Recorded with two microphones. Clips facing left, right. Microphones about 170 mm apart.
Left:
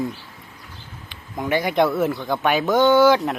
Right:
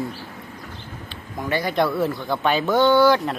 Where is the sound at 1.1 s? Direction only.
20° left (ahead or behind).